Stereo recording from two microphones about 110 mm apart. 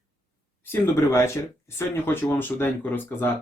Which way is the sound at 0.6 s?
20° left (ahead or behind).